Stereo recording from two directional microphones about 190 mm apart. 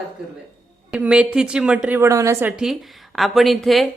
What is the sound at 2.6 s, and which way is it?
A woman's voice, centre (ahead or behind).